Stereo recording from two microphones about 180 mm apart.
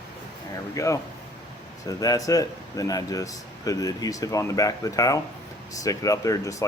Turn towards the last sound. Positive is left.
turn(degrees=20)  # may be behind; listen again after turning